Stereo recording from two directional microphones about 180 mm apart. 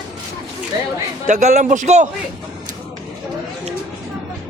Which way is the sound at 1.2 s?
40° right (ahead or behind).